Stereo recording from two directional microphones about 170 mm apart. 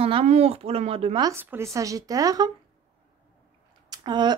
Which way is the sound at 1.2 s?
15° right (ahead or behind).